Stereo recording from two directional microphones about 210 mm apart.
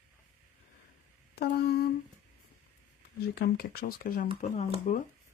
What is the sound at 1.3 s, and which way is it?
Humming, 50° left (ahead or behind).